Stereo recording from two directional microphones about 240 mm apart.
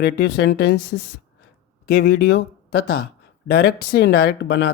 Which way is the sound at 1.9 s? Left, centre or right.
Left.